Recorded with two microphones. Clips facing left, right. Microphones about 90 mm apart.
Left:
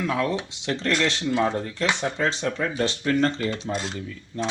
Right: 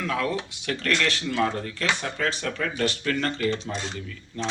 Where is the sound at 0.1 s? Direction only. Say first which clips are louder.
Left 2 dB; 25° left (ahead or behind).